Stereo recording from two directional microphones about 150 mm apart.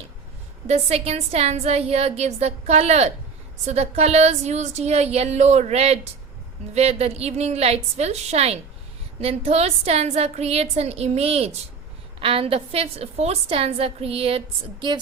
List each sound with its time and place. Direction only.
0.7 s a woman's voice: 45° right (ahead or behind)